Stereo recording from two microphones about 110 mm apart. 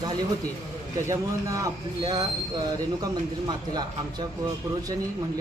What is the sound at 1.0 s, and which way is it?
Speech, 30° right (ahead or behind).